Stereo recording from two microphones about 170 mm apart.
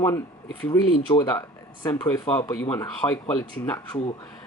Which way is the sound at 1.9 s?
10° left (ahead or behind).